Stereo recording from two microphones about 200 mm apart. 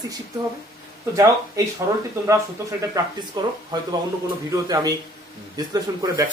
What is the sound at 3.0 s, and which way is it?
A man's voice, 20° right (ahead or behind).